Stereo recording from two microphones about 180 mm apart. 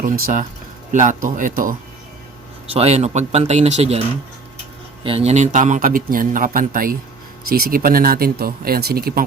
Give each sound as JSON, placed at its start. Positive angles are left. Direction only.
{"t": 0.0, "sound": "a man's voice", "side_deg": -50}
{"t": 2.7, "sound": "speech", "side_deg": -35}
{"t": 5.0, "sound": "a man's voice", "side_deg": -35}